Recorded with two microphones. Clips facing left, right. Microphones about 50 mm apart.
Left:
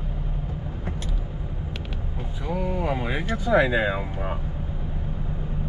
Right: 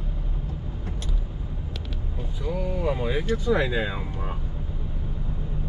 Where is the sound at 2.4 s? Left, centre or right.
Centre.